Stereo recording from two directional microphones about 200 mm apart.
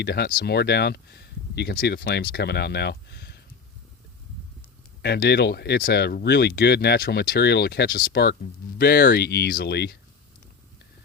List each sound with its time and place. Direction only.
0.0 s speech: 55° left (ahead or behind)
5.0 s speech: 55° left (ahead or behind)